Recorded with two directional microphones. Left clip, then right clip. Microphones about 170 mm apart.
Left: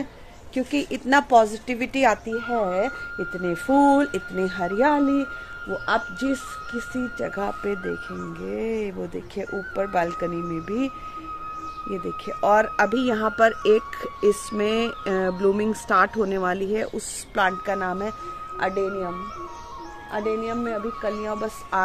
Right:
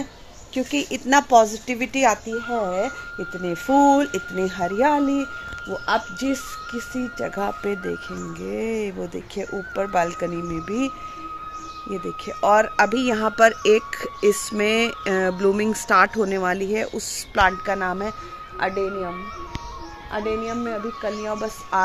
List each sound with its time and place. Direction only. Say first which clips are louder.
0.6 s speech: right 1 dB; 10° right (ahead or behind)
7.2 s speech: right 3 dB; 25° right (ahead or behind)
11.9 s speech: right 1 dB; 15° right (ahead or behind)